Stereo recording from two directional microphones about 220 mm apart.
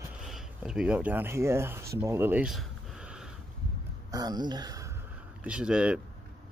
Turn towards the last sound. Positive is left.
turn(degrees=-5)  # may be behind; listen again after turning